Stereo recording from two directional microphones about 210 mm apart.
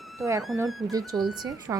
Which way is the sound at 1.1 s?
15° right (ahead or behind).